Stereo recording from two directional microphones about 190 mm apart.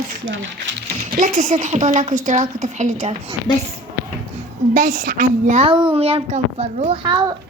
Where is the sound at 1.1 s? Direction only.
40° right (ahead or behind).